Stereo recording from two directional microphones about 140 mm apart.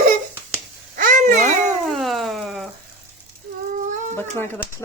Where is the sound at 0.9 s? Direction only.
70° right (ahead or behind).